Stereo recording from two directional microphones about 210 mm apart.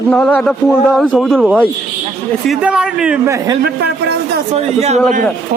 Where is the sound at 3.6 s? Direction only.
50° right (ahead or behind).